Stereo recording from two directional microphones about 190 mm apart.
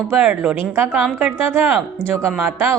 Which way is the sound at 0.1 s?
5° right (ahead or behind).